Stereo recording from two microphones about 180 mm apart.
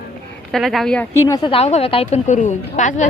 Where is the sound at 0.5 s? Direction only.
Centre (ahead or behind); by 1.5 s 15° left (ahead or behind).